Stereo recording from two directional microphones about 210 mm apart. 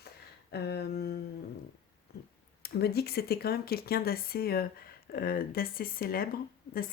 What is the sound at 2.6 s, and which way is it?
Speech, 50° left (ahead or behind).